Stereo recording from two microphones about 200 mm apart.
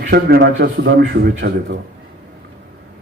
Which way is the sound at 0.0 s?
50° right (ahead or behind).